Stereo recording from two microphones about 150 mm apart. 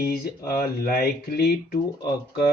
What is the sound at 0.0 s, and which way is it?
Speech, 90° left.